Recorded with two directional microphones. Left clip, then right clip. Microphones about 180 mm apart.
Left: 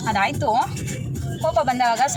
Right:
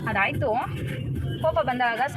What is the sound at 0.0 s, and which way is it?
Speech, 5° left (ahead or behind).